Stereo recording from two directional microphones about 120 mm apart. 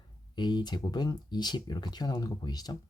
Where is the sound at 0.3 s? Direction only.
35° left (ahead or behind).